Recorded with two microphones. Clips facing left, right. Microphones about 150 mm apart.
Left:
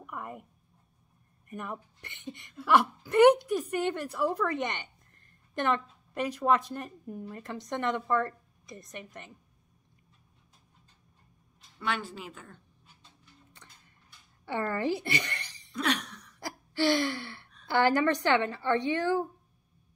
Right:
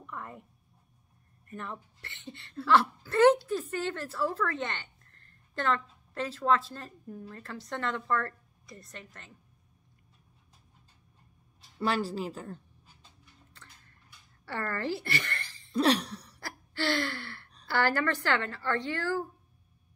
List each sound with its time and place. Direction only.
0.0 s speech: 15° left (ahead or behind)
1.5 s a woman's voice: 15° left (ahead or behind)
11.8 s speech: 35° right (ahead or behind)
13.5 s a sound: 15° left (ahead or behind)
14.4 s speech: 20° left (ahead or behind)
15.7 s cough: 35° right (ahead or behind)
16.3 s gasp: 15° left (ahead or behind)
17.6 s speech: 20° left (ahead or behind)